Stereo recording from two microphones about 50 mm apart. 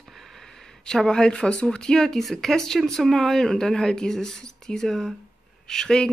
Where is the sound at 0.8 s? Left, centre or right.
Centre.